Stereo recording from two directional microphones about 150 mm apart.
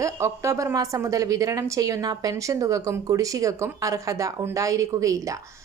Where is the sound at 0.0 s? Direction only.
20° right (ahead or behind).